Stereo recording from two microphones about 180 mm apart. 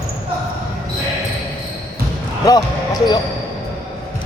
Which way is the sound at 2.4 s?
20° left (ahead or behind).